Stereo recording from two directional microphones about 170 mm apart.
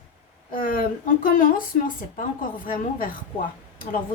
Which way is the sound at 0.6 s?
55° left (ahead or behind).